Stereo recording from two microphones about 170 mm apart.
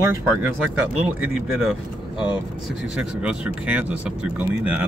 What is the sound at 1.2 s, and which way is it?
Speech, centre (ahead or behind).